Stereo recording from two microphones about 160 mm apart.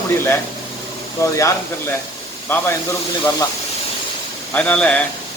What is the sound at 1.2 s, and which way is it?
Speech, 20° left (ahead or behind).